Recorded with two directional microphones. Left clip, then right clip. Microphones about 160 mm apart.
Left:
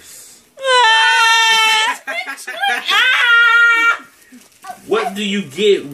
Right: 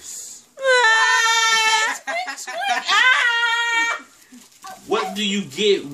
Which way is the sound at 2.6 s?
10° right (ahead or behind).